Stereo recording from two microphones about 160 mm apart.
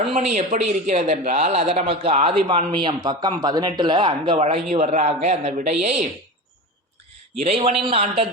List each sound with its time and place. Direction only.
0.3 s a man's voice: 45° right (ahead or behind)
7.4 s speech: 40° right (ahead or behind)